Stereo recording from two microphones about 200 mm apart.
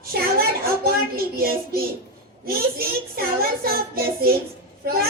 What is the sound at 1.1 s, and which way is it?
Speech, 50° right (ahead or behind).